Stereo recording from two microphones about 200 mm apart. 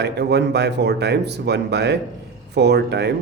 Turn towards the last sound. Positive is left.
turn(degrees=-55)  # may be behind; listen again after turning